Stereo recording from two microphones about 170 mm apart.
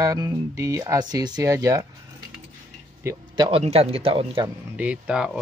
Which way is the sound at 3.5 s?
35° right (ahead or behind).